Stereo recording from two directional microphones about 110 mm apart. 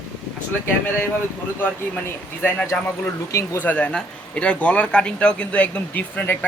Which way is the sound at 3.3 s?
30° left (ahead or behind).